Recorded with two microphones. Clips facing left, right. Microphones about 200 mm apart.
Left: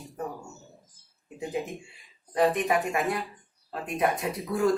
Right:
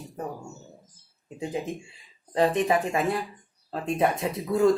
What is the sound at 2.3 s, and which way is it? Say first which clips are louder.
A woman's voice: right 2 dB; 25° right (ahead or behind).